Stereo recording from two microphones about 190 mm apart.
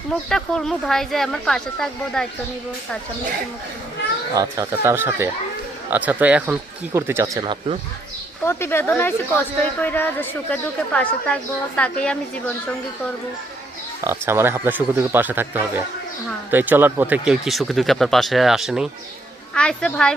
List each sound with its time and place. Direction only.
0.3 s speech: 5° left (ahead or behind)
4.4 s speech: 15° right (ahead or behind)
7.4 s speech: 30° right (ahead or behind)
8.4 s a woman's voice: 15° left (ahead or behind)
14.0 s speech: 15° right (ahead or behind); by 20.1 s 5° left (ahead or behind)